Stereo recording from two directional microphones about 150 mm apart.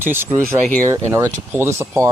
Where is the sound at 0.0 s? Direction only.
15° right (ahead or behind).